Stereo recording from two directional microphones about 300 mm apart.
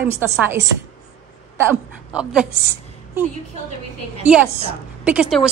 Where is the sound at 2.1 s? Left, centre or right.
Centre.